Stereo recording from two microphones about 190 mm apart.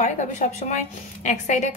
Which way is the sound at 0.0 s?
40° left (ahead or behind).